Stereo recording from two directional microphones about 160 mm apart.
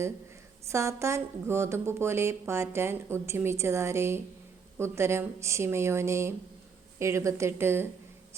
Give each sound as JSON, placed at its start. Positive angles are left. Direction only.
{"t": 0.7, "sound": "a woman's voice", "side_deg": -20}